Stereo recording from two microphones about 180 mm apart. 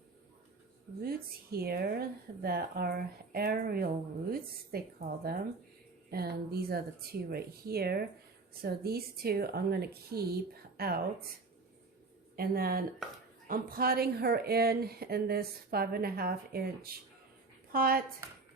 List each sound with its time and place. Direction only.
1.0 s speech: 60° right (ahead or behind)
12.4 s speech: 55° right (ahead or behind)